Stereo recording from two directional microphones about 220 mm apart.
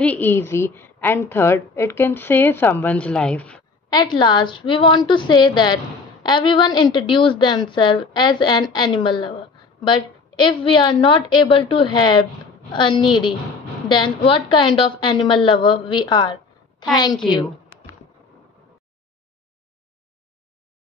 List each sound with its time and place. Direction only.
0.0 s a woman's voice: 5° left (ahead or behind)
3.9 s a woman's voice: 20° left (ahead or behind)